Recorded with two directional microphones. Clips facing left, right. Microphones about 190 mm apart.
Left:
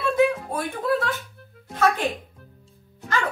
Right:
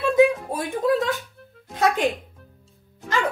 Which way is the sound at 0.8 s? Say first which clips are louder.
Right 4 dB; 15° right (ahead or behind).